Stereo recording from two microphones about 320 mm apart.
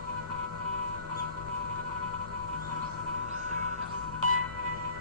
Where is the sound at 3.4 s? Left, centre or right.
Right.